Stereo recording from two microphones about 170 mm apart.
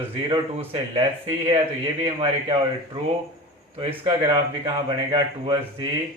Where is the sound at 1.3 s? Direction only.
20° right (ahead or behind).